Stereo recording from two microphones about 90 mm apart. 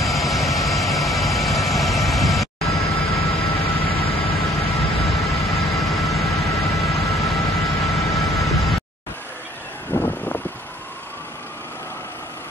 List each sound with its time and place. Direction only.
0.0 s vehicle: centre (ahead or behind)
3.6 s vehicle: 90° left
4.4 s vehicle: centre (ahead or behind)
9.9 s a sound: 25° left (ahead or behind)